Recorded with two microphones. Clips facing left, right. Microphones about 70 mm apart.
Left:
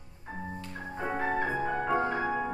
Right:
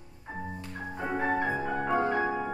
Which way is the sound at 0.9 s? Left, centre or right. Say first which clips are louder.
Right 1 dB; centre.